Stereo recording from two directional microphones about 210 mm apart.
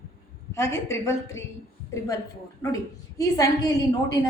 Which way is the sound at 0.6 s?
15° left (ahead or behind).